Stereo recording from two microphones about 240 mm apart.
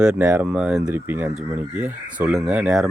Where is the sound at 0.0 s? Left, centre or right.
Centre.